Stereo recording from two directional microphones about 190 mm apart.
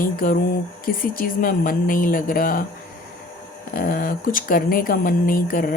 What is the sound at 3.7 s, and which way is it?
Speech, 50° left (ahead or behind).